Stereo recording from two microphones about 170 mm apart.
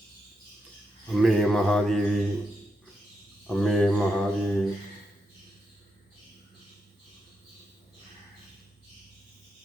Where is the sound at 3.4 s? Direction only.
Centre (ahead or behind).